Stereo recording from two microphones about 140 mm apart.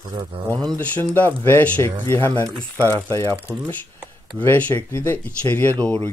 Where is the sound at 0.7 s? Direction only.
10° left (ahead or behind).